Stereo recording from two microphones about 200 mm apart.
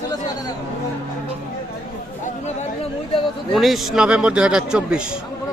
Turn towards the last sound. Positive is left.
turn(degrees=-5)  # may be behind; listen again after turning